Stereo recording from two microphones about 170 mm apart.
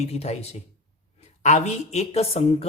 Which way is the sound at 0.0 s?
40° left (ahead or behind).